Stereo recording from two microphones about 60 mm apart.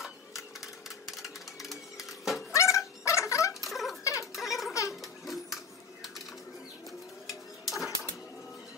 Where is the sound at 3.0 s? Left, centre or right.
Left.